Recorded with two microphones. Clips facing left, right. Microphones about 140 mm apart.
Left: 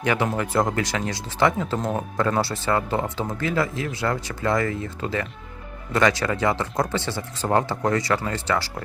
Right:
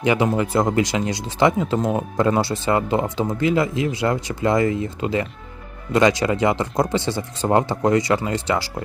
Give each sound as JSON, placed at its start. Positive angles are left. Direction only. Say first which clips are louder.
{"t": 0.0, "sound": "speech", "louder": "right 4 dB", "side_deg": -15}